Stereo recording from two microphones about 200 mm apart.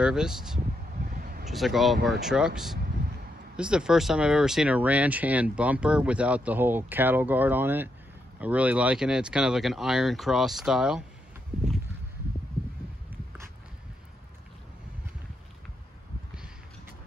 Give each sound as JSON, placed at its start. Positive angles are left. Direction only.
{"t": 0.0, "sound": "speech", "side_deg": -5}
{"t": 1.0, "sound": "a sound", "side_deg": -45}
{"t": 1.4, "sound": "speech", "side_deg": 0}